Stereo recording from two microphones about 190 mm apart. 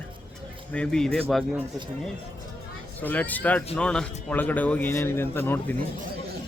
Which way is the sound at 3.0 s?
10° left (ahead or behind).